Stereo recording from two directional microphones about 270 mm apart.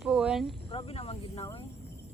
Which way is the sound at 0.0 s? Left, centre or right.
Centre.